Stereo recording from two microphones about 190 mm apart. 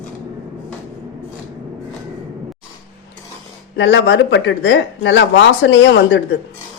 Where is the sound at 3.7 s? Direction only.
70° left (ahead or behind).